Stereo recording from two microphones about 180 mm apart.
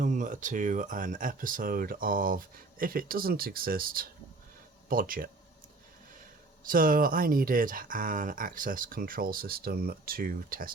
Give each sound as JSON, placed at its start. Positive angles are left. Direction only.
{"t": 0.0, "sound": "speech", "side_deg": -45}
{"t": 6.7, "sound": "speech", "side_deg": -50}